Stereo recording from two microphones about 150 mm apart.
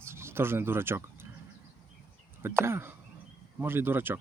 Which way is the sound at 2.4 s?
15° right (ahead or behind).